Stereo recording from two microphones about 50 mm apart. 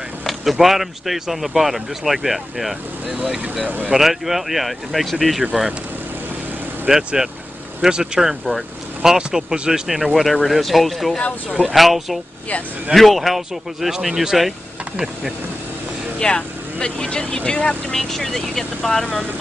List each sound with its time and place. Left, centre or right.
0.2 s speech: centre
3.6 s speech: right
3.9 s speech: centre
6.9 s speech: centre
16.2 s speech: centre
18.1 s speech: centre